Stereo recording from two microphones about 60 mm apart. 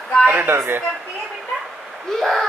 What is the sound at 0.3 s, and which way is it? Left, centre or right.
Speech, right.